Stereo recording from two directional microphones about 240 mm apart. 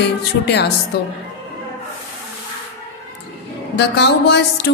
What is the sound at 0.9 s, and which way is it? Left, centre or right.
Speech, left.